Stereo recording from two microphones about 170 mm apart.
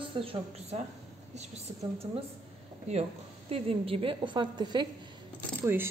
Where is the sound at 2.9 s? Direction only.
40° right (ahead or behind).